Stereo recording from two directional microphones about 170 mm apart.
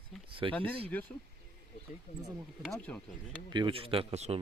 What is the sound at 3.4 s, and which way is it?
Speech, 30° right (ahead or behind).